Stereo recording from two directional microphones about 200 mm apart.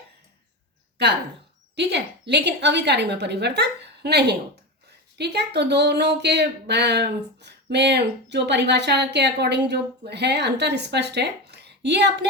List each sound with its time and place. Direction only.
1.7 s speech: 55° right (ahead or behind)